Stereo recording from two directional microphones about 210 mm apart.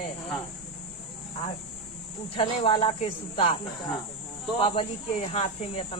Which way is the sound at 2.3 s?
25° left (ahead or behind).